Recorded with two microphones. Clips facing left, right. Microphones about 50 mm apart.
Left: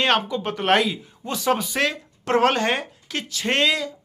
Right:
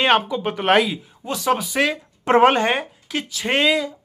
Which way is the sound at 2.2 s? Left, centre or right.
Right.